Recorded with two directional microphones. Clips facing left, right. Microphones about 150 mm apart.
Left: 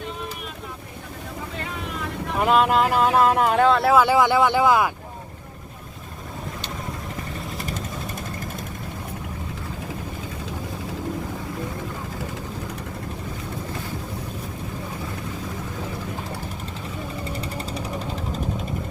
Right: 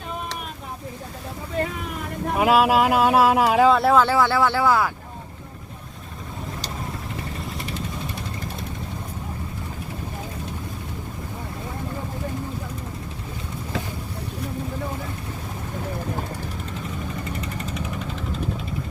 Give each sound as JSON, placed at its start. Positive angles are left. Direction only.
{"t": 2.4, "sound": "speech", "side_deg": -5}
{"t": 3.9, "sound": "speech", "side_deg": 15}
{"t": 17.4, "sound": "vehicle", "side_deg": 35}